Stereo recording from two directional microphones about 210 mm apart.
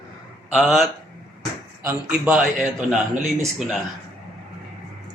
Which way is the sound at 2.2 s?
Centre (ahead or behind).